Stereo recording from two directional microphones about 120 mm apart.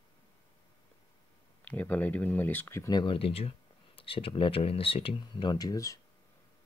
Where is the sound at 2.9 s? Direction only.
45° left (ahead or behind); by 6.0 s 30° left (ahead or behind).